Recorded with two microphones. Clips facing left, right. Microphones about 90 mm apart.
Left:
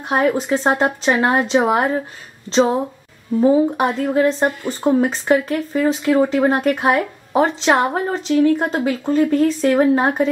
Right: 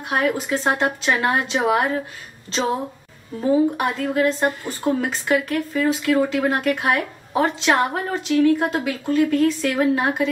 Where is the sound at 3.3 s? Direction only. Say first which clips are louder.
Left 4 dB; 25° left (ahead or behind).